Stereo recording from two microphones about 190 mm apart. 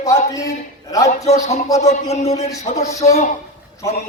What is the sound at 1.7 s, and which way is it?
A man's voice, 35° left (ahead or behind).